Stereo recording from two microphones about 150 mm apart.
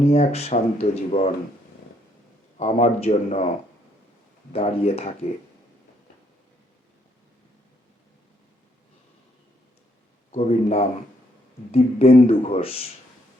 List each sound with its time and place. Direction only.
0.0 s speech: 45° left (ahead or behind)
2.6 s speech: 45° left (ahead or behind)
4.5 s speech: 40° left (ahead or behind)
10.3 s speech: 45° left (ahead or behind)